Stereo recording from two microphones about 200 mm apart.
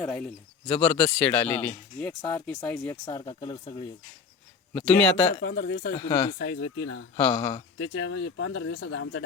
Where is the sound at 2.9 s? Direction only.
20° left (ahead or behind).